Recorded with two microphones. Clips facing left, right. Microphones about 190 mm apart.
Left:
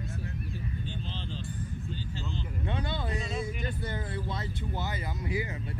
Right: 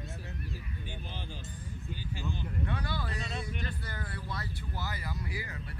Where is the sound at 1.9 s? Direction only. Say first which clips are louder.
Left 1 dB; 10° right (ahead or behind).